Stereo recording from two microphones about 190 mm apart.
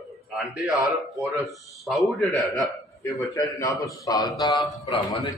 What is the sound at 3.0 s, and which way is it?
A man's voice, 15° left (ahead or behind).